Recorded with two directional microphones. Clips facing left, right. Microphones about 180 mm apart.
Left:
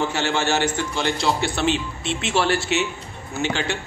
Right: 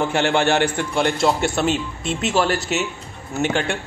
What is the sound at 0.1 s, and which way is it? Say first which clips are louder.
A man's voice: right 4 dB; 55° right (ahead or behind).